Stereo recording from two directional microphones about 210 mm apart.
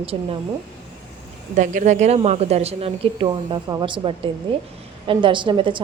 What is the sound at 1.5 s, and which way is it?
A woman's voice, 35° right (ahead or behind).